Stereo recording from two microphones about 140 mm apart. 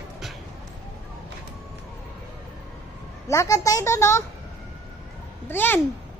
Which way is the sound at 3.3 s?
20° left (ahead or behind).